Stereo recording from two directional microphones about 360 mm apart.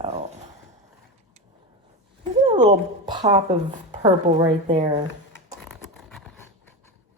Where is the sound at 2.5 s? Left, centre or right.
Centre.